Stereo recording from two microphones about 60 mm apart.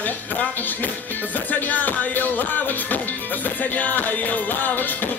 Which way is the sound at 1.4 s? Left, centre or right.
Left.